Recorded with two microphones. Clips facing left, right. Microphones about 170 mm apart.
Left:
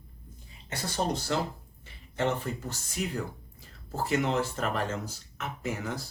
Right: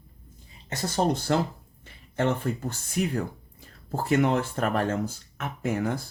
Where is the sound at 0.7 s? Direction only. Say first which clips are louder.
Right 5 dB; 45° right (ahead or behind).